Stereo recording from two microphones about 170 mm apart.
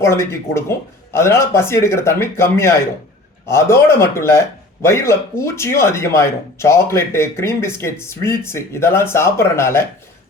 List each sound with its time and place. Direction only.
0.0 s speech: 15° left (ahead or behind)